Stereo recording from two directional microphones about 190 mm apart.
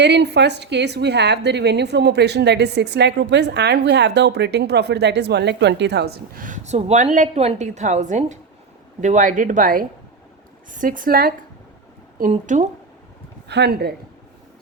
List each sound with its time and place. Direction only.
0.0 s a woman's voice: 65° right (ahead or behind); by 12.6 s 40° right (ahead or behind)
13.5 s a woman's voice: 60° right (ahead or behind)